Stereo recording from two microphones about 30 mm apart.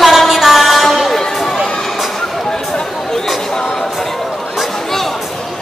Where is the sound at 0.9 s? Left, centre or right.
Centre.